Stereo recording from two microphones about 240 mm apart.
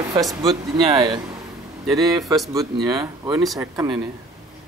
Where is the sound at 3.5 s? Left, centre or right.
Centre.